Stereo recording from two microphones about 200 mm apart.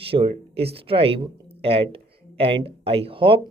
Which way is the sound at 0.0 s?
25° right (ahead or behind).